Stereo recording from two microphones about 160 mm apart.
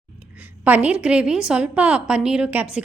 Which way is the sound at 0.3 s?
10° right (ahead or behind).